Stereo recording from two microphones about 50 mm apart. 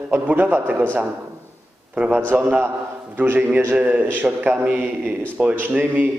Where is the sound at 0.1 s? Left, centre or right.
Right.